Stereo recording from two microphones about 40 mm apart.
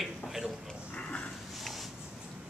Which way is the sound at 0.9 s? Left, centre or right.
Left.